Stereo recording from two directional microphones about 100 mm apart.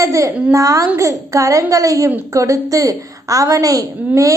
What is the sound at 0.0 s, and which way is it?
A woman's voice, 35° right (ahead or behind).